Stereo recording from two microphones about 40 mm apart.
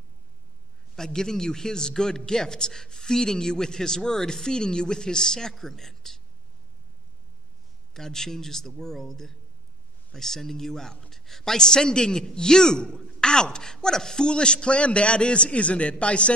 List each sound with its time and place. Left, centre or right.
0.9 s a man's voice: centre
7.9 s a man's voice: centre; by 16.3 s left